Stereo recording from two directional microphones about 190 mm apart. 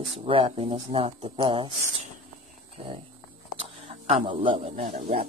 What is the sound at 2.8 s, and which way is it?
Speech, 30° right (ahead or behind).